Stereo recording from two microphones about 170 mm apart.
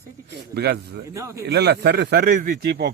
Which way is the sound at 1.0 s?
20° right (ahead or behind).